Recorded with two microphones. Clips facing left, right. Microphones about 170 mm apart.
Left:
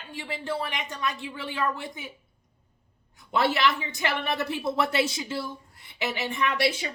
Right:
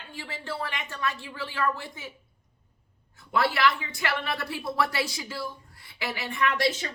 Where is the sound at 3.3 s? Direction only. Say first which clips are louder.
Left 1 dB; 20° left (ahead or behind).